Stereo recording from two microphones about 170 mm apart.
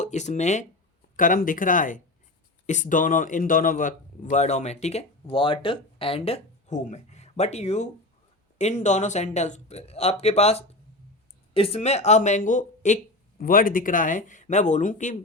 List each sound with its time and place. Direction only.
0.0 s speech: 45° left (ahead or behind)